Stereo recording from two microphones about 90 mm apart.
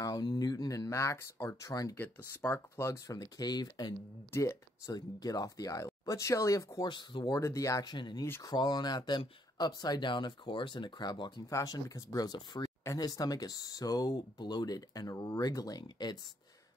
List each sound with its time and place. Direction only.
0.0 s speech: 50° left (ahead or behind)
2.0 s speech: 20° left (ahead or behind)
2.8 s speech: 40° left (ahead or behind)
4.3 s speech: 35° left (ahead or behind)
6.9 s speech: 60° left (ahead or behind)
7.2 s speech: 35° left (ahead or behind)
7.8 s speech: 55° left (ahead or behind)
11.4 s speech: 40° left (ahead or behind)